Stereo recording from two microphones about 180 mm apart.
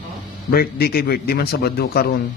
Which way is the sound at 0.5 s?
60° left (ahead or behind).